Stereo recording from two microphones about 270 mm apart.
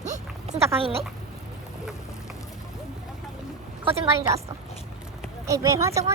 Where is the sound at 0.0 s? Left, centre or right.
Right.